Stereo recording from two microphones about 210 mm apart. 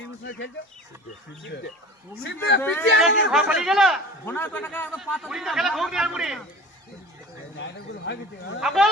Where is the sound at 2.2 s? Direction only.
55° left (ahead or behind).